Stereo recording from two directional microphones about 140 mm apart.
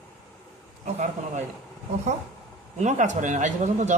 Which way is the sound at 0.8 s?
65° right (ahead or behind).